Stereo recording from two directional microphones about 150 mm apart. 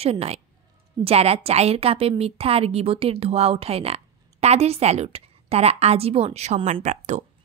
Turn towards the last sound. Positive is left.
turn(degrees=-50)  # may be behind; listen again after turning